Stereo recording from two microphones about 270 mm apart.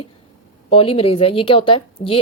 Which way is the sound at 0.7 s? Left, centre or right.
Left.